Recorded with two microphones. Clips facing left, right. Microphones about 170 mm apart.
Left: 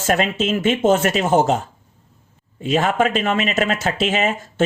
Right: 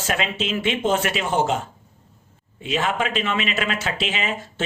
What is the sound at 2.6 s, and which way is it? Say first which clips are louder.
Speech: left 6 dB; 45° left (ahead or behind).